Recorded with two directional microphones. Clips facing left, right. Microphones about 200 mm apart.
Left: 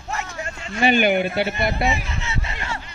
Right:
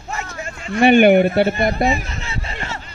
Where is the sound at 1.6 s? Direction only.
45° right (ahead or behind).